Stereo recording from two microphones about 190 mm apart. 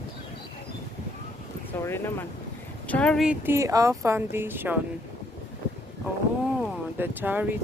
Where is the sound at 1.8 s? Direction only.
10° left (ahead or behind); by 4.7 s 10° right (ahead or behind).